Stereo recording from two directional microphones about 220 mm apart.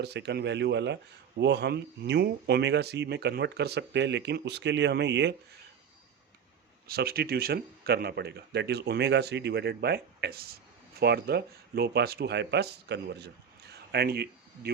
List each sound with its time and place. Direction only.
0.0 s speech: 50° right (ahead or behind)
6.8 s speech: 45° right (ahead or behind)